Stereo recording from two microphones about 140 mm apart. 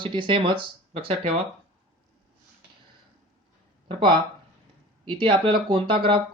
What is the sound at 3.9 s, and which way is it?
Speech, 35° right (ahead or behind).